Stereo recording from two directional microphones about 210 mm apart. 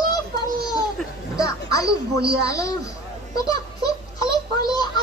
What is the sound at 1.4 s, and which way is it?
Speech, 15° left (ahead or behind).